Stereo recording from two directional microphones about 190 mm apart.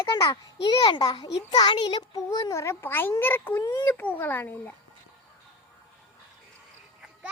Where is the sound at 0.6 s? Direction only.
25° left (ahead or behind).